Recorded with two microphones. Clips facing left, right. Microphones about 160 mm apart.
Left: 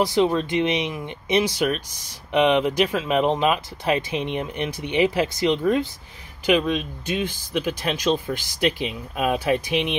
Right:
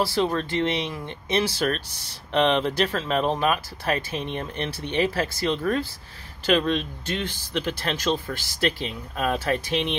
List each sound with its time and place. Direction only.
0.0 s speech: 20° left (ahead or behind)